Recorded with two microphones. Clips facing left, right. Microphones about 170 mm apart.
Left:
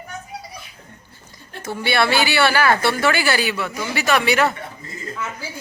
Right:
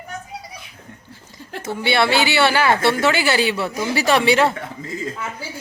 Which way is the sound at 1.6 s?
20° right (ahead or behind).